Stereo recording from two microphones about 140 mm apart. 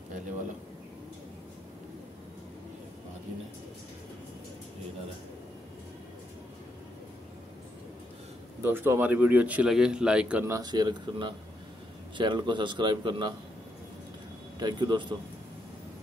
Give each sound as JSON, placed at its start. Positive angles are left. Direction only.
{"t": 8.6, "sound": "a man's voice", "side_deg": -15}
{"t": 10.4, "sound": "a man's voice", "side_deg": -25}
{"t": 14.6, "sound": "a man's voice", "side_deg": -30}